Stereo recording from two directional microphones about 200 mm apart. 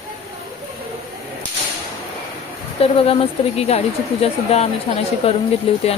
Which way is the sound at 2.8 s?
30° left (ahead or behind).